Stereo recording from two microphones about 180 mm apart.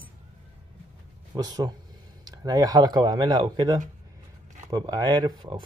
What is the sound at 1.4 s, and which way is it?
Speech, 20° right (ahead or behind).